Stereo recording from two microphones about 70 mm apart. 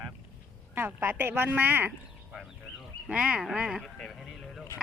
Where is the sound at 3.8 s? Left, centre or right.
Centre.